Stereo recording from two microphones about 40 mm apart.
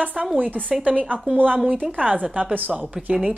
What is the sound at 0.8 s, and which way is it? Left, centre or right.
Speech, right.